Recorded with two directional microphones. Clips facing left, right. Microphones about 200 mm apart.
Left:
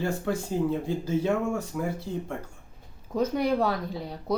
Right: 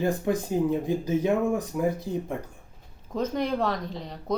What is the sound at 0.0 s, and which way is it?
Speech, 15° right (ahead or behind).